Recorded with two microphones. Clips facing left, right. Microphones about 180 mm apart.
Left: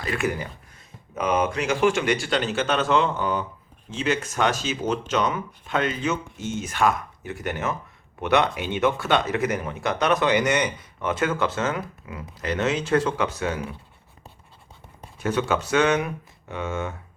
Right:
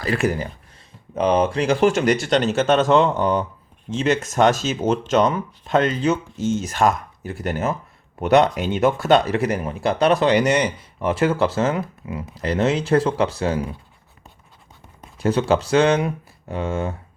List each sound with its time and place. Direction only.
0.0 s speech: 35° right (ahead or behind)
15.2 s speech: 35° right (ahead or behind)